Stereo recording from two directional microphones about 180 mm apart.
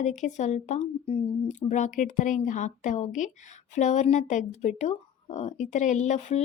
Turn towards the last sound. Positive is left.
turn(degrees=40)  # may be behind; listen again after turning